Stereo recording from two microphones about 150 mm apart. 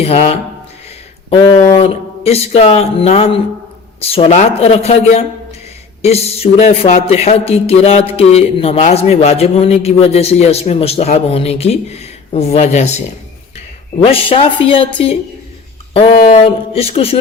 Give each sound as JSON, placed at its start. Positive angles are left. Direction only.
{"t": 0.0, "sound": "speech", "side_deg": 40}
{"t": 1.4, "sound": "speech", "side_deg": 20}
{"t": 1.7, "sound": "speech", "side_deg": 40}
{"t": 14.0, "sound": "speech", "side_deg": 40}
{"t": 16.4, "sound": "speech", "side_deg": 40}